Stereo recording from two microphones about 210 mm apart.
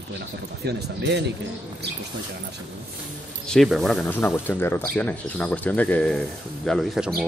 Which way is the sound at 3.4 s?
Centre (ahead or behind).